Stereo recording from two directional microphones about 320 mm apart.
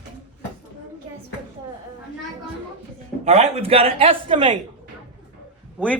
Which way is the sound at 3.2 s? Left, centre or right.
Right.